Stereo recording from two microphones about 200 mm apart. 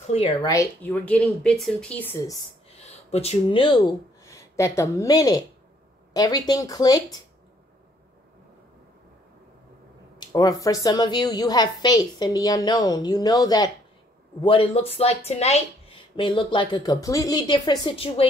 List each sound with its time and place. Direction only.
0.0 s speech: 30° left (ahead or behind)
0.5 s speech: 15° left (ahead or behind)
2.7 s speech: 30° left (ahead or behind)
10.1 s speech: 20° left (ahead or behind)